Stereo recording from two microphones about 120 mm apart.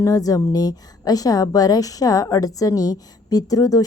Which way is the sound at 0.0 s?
30° left (ahead or behind).